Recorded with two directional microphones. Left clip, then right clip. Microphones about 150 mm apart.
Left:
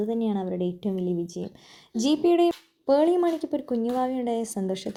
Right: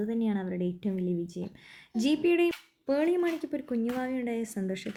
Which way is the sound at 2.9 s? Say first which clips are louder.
Left 6 dB; 15° left (ahead or behind).